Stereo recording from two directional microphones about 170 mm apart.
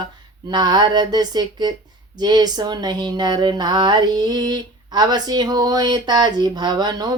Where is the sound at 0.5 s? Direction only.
25° right (ahead or behind).